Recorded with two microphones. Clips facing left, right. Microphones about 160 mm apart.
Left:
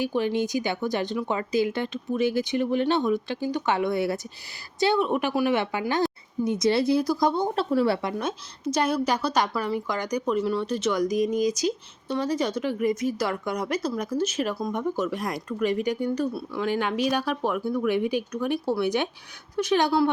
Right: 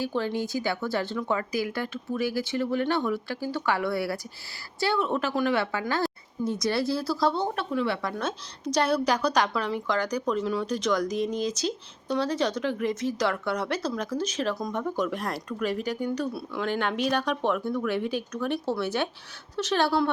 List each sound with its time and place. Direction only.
0.0 s a woman's voice: 15° left (ahead or behind)
7.5 s speech: 35° left (ahead or behind)
8.2 s a woman's voice: 10° left (ahead or behind)